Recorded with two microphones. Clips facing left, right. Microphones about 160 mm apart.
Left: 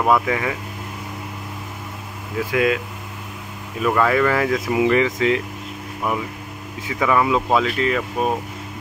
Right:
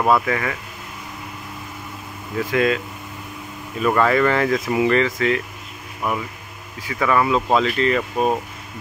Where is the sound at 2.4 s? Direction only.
10° left (ahead or behind).